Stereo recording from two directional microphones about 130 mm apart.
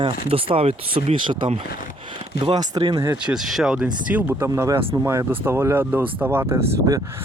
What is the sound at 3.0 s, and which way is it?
Speech, 15° right (ahead or behind).